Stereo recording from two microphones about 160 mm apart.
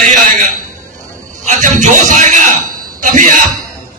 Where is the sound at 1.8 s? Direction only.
50° right (ahead or behind).